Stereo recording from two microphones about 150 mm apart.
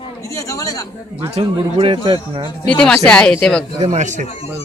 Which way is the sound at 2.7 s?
5° left (ahead or behind).